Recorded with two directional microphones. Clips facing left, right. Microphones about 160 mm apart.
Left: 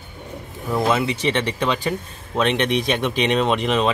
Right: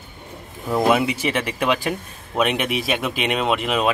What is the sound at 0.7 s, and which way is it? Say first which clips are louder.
Speech: right 2 dB; 15° right (ahead or behind).